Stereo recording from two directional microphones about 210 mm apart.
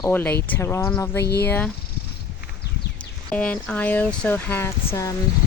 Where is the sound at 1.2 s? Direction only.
50° left (ahead or behind).